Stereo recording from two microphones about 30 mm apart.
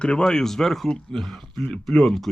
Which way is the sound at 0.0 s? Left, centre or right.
Left.